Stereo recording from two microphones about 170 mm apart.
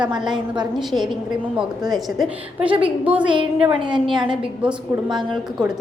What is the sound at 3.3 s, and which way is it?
A woman's voice, 30° right (ahead or behind).